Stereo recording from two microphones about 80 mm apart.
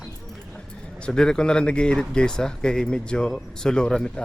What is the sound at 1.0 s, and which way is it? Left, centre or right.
Speech, centre.